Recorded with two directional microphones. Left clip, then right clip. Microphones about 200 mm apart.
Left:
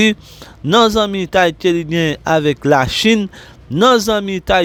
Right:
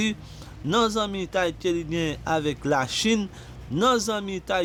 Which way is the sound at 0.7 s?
45° left (ahead or behind).